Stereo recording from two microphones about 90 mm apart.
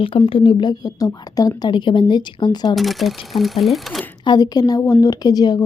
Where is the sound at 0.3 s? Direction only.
65° left (ahead or behind).